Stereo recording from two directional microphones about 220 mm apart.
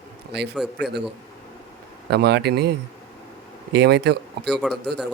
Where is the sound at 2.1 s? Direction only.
50° right (ahead or behind).